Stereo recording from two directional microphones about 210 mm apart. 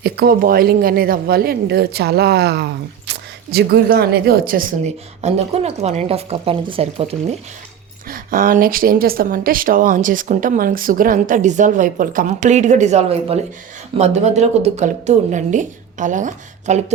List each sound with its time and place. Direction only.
0.0 s a woman's voice: 45° right (ahead or behind)
5.2 s speech: 30° right (ahead or behind)
8.0 s speech: 40° right (ahead or behind)